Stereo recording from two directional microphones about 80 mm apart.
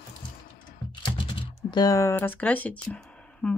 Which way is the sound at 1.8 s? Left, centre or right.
Left.